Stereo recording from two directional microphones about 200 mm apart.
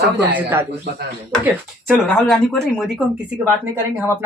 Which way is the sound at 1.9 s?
5° left (ahead or behind).